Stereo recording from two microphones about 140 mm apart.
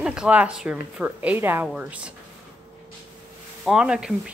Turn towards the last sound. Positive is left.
turn(degrees=-5)  # may be behind; listen again after turning